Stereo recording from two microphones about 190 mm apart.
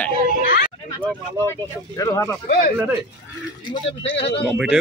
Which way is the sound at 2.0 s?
15° left (ahead or behind).